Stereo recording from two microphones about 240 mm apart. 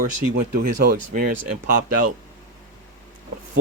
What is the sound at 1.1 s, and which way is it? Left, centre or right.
Speech, right.